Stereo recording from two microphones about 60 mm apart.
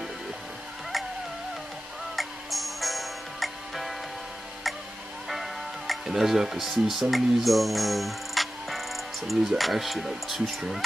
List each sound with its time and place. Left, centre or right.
2.1 s music: centre
5.3 s speech: centre